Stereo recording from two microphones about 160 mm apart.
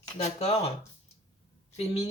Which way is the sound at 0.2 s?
40° left (ahead or behind).